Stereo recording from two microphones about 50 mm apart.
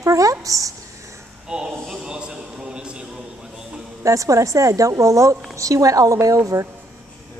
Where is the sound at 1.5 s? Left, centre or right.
Centre.